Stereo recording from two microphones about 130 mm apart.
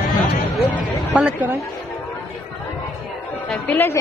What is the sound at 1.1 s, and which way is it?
Speech, 10° right (ahead or behind).